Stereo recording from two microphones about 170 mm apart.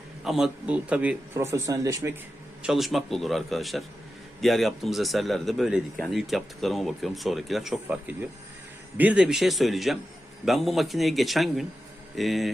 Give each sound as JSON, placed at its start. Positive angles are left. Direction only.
{"t": 0.3, "sound": "a man's voice", "side_deg": -5}
{"t": 2.6, "sound": "speech", "side_deg": 0}